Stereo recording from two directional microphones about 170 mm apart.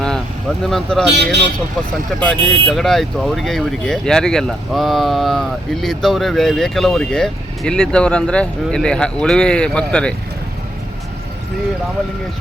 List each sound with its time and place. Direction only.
0.6 s speech: 5° left (ahead or behind)
1.1 s speech: 80° right
2.2 s speech: 5° left (ahead or behind)